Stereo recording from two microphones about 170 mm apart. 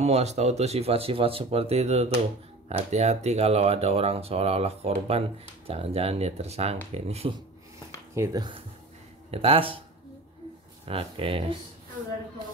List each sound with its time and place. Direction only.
0.0 s speech: 40° right (ahead or behind)
8.1 s speech: 20° right (ahead or behind)
10.9 s speech: 35° right (ahead or behind)